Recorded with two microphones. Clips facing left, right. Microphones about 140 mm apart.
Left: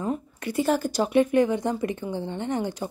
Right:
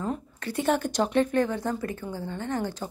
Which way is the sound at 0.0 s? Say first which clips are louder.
Left 3 dB; 15° left (ahead or behind).